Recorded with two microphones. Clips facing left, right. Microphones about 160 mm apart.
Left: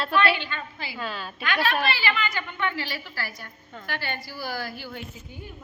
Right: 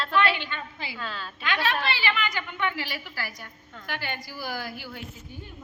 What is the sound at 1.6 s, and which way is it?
A woman's voice, 20° right (ahead or behind).